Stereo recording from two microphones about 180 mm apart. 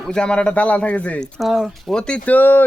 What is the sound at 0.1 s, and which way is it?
Speech, 5° left (ahead or behind).